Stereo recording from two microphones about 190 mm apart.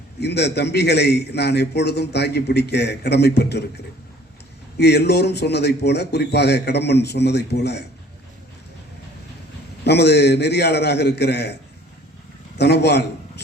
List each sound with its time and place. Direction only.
0.2 s a man's voice: 60° left (ahead or behind)
4.8 s a man's voice: 60° left (ahead or behind)
9.8 s a man's voice: 60° left (ahead or behind)
12.5 s a man's voice: 60° left (ahead or behind)